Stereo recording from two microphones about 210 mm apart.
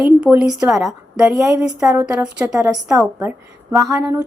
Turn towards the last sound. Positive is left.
turn(degrees=-15)  # may be behind; listen again after turning